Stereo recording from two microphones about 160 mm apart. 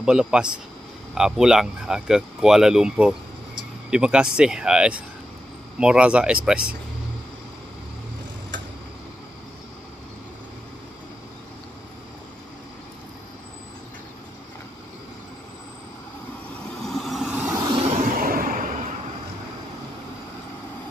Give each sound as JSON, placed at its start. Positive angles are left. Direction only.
{"t": 0.0, "sound": "speech", "side_deg": -5}
{"t": 16.8, "sound": "vehicle", "side_deg": 0}
{"t": 18.0, "sound": "a sound", "side_deg": -65}